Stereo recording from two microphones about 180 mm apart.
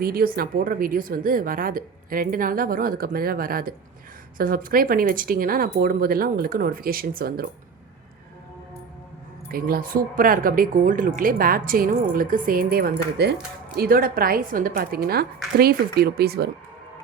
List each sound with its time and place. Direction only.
0.0 s a woman's voice: 55° right (ahead or behind)
9.5 s a woman's voice: 55° right (ahead or behind)